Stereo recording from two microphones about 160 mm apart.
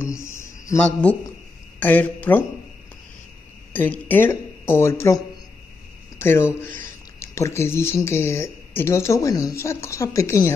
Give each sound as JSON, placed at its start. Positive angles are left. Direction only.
{"t": 0.0, "sound": "a sound", "side_deg": 15}
{"t": 1.8, "sound": "speech", "side_deg": 10}
{"t": 3.7, "sound": "speech", "side_deg": 10}